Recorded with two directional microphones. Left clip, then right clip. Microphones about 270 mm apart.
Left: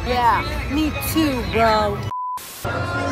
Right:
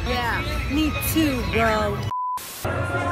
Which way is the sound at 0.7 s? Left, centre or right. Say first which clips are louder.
Even; centre.